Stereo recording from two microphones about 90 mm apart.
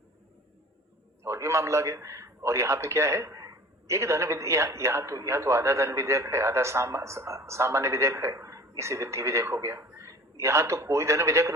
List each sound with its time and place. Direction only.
1.2 s a man's voice: 35° right (ahead or behind)